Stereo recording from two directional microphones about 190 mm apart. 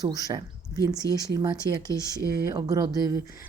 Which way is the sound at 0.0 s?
20° right (ahead or behind).